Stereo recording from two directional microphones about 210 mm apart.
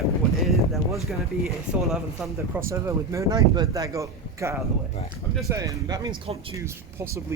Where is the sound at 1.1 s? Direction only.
Centre (ahead or behind).